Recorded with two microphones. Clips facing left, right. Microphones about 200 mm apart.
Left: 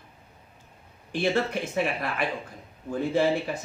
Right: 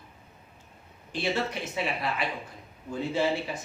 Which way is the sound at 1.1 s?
50° left (ahead or behind).